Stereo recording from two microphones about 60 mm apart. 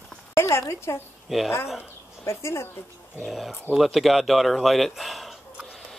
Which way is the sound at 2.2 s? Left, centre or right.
Left.